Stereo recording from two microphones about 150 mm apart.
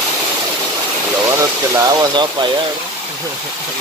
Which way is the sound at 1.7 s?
25° right (ahead or behind).